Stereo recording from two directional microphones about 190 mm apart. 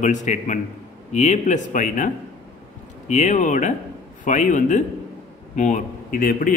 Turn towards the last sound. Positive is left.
turn(degrees=45)  # may be behind; listen again after turning